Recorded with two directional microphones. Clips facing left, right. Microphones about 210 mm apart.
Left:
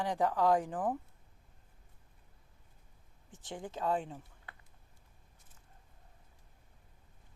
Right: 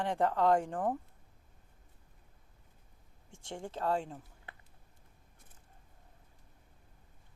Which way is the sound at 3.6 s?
5° left (ahead or behind).